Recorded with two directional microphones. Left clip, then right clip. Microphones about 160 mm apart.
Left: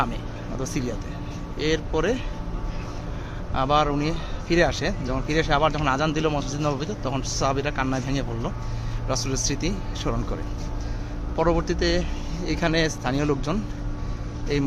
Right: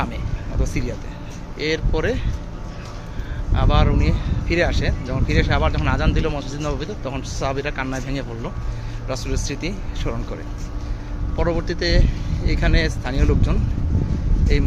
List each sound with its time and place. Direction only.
0.6 s speech: 15° left (ahead or behind)
3.5 s speech: 20° left (ahead or behind)
11.3 s speech: 20° left (ahead or behind)